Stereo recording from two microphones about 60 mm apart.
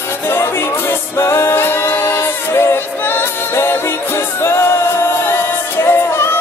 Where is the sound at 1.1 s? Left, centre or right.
Left.